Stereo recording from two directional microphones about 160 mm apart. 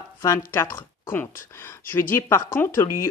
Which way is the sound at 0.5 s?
15° left (ahead or behind).